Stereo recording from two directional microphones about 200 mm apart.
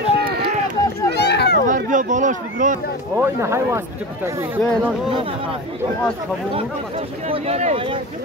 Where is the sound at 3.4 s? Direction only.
15° right (ahead or behind).